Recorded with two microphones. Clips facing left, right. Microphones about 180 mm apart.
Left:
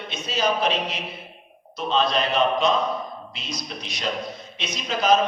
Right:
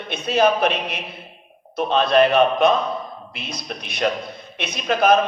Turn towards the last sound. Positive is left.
turn(degrees=-60)  # may be behind; listen again after turning